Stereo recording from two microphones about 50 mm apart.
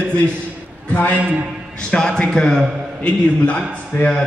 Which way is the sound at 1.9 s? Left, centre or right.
Centre.